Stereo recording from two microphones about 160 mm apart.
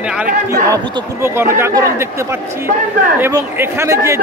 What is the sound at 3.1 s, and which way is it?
A man's voice, 15° right (ahead or behind).